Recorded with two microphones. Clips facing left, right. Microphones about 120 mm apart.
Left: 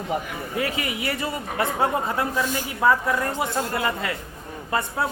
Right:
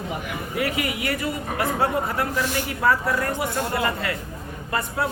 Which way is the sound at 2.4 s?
80° right.